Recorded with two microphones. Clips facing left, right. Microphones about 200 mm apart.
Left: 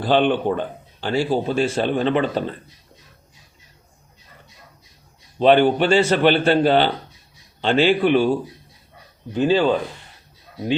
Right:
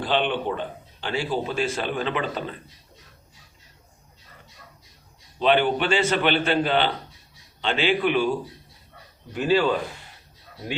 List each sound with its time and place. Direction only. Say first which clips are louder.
0.0 s speech: left 6 dB; 45° left (ahead or behind)
1.0 s a man's voice: left 6 dB; 30° left (ahead or behind)
5.4 s a man's voice: left 6 dB; 40° left (ahead or behind)
9.3 s speech: left 4 dB; 25° left (ahead or behind)